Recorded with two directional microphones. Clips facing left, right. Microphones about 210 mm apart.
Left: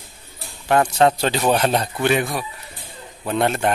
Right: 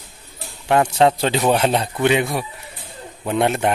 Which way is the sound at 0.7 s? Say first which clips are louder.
Right 1 dB; 20° right (ahead or behind).